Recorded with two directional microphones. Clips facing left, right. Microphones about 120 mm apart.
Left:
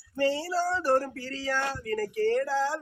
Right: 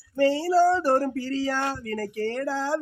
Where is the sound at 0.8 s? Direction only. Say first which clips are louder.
Right 3 dB; 20° right (ahead or behind).